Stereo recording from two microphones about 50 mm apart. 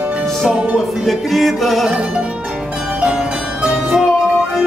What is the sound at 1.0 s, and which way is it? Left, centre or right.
Music, centre.